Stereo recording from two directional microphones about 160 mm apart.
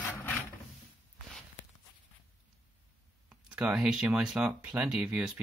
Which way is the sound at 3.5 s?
10° right (ahead or behind).